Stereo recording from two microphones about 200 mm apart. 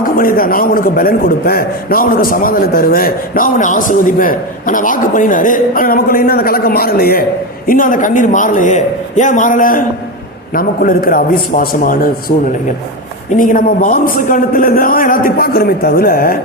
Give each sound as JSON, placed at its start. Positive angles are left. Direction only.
{"t": 0.0, "sound": "a man's voice", "side_deg": 45}
{"t": 13.3, "sound": "a man's voice", "side_deg": 40}